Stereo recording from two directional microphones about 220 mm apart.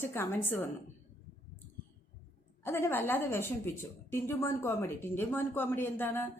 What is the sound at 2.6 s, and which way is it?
Speech, 10° left (ahead or behind).